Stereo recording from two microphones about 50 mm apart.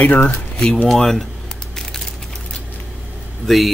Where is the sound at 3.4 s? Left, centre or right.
Centre.